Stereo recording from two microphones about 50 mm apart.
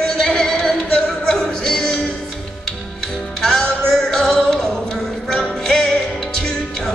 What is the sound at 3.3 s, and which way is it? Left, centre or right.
Music, centre.